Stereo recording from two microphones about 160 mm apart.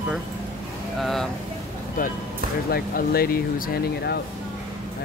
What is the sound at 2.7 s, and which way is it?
Speech, 75° left (ahead or behind).